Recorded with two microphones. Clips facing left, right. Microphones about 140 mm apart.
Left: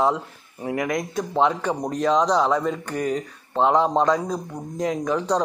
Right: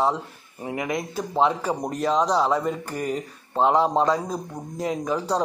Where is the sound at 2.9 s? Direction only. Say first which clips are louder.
Left 3 dB; 40° left (ahead or behind).